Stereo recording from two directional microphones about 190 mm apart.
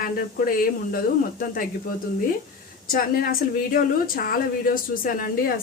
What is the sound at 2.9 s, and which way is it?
Speech, 50° left (ahead or behind).